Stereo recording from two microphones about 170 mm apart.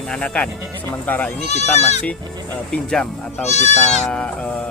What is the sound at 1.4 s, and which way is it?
Speech, 40° left (ahead or behind).